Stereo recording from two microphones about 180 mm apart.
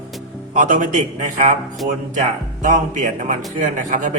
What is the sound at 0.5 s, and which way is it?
A man's voice, 45° right (ahead or behind).